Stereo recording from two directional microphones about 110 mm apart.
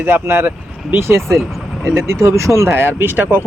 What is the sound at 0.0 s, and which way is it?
Speech, 20° right (ahead or behind).